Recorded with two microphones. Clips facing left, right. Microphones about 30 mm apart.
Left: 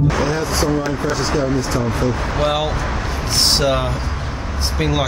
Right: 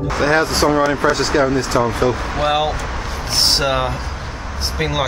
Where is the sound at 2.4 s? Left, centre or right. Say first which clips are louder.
Right 2 dB; centre.